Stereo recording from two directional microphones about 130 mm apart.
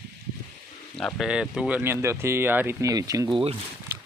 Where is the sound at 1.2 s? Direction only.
5° right (ahead or behind).